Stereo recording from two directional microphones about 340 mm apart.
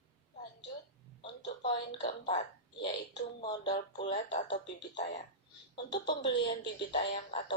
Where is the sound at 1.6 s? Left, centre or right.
Centre.